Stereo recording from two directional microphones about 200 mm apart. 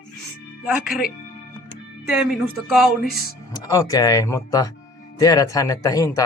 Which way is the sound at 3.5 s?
15° left (ahead or behind).